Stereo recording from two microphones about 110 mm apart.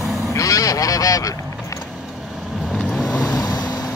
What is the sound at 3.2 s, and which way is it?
Vehicle, 35° left (ahead or behind).